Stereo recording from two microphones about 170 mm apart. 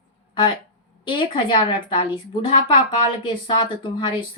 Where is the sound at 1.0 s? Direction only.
30° left (ahead or behind).